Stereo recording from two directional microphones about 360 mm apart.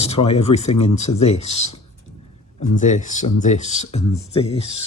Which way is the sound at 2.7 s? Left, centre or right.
Centre.